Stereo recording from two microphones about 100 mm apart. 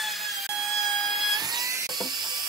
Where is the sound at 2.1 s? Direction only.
45° right (ahead or behind).